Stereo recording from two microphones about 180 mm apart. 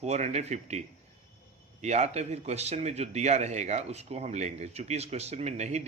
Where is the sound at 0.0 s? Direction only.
40° right (ahead or behind).